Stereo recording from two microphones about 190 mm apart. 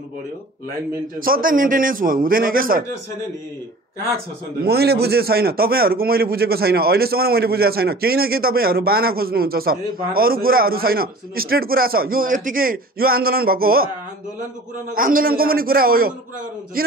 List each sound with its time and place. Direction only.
1.2 s a man's voice: 50° right (ahead or behind)
4.6 s a man's voice: 55° right (ahead or behind)
15.0 s a man's voice: 45° right (ahead or behind)